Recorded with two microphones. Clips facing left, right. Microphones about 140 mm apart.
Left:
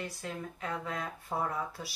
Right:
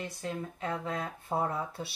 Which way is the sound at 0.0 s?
25° right (ahead or behind).